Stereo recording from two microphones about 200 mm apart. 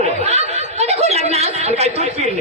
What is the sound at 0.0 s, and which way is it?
Snicker, 35° right (ahead or behind).